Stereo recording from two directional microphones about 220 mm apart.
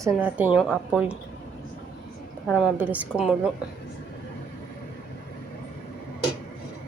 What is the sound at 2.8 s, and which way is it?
Speech, 5° right (ahead or behind).